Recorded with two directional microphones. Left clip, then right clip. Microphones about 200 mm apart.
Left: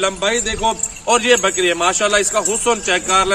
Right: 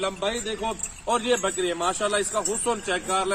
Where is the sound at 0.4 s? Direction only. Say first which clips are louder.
Left 10 dB; 10° left (ahead or behind).